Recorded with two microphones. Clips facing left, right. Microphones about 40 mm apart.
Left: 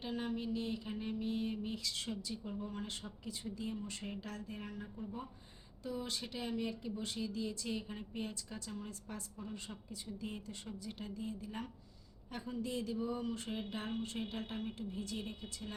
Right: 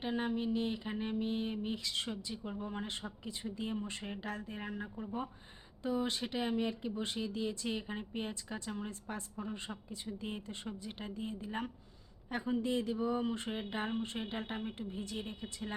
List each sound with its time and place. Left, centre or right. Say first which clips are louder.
0.0 s speech: right 4 dB; right